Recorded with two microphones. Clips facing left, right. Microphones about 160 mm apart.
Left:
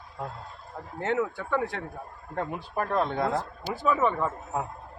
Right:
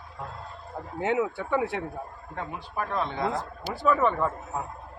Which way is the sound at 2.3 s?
50° left (ahead or behind).